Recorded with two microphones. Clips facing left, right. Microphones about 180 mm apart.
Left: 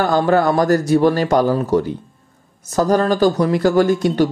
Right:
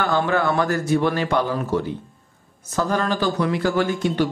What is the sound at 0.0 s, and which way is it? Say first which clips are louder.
Speech: left 6 dB; 40° left (ahead or behind).